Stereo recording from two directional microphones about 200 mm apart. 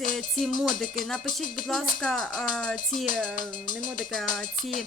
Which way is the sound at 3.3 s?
45° left (ahead or behind).